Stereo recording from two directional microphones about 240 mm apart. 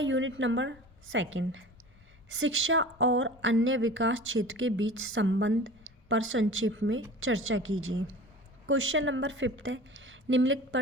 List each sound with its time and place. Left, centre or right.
0.0 s a woman's voice: right